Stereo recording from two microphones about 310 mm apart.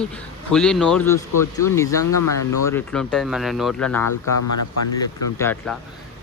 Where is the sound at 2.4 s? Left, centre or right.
Left.